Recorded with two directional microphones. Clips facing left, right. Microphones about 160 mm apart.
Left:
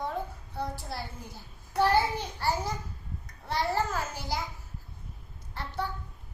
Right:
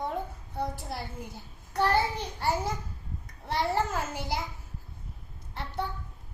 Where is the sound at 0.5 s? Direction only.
20° right (ahead or behind).